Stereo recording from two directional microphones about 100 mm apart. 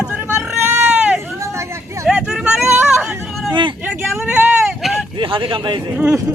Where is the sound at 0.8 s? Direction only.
10° right (ahead or behind).